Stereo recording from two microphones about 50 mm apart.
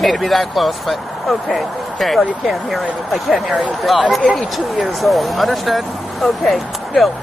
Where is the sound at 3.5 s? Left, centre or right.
Centre.